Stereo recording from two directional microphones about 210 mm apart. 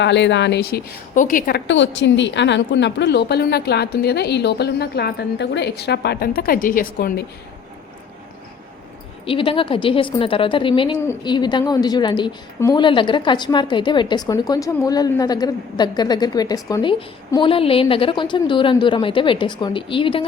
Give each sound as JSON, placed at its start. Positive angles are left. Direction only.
{"t": 0.0, "sound": "a woman's voice", "side_deg": 55}
{"t": 9.2, "sound": "a woman's voice", "side_deg": 25}